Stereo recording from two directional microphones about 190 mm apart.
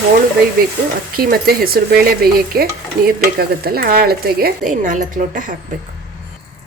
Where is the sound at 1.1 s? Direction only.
50° right (ahead or behind).